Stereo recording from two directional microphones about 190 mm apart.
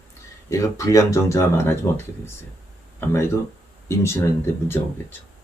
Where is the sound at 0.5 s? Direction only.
15° left (ahead or behind).